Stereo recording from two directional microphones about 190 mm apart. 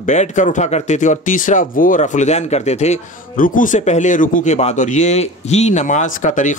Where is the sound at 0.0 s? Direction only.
40° left (ahead or behind).